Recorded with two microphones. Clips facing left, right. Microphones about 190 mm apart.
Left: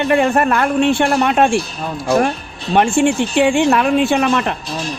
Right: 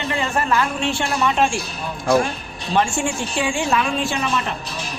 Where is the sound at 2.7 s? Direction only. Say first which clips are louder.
Left 7 dB; 60° left (ahead or behind).